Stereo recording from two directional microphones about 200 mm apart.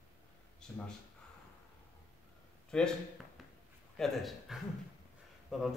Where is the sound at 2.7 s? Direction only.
5° left (ahead or behind).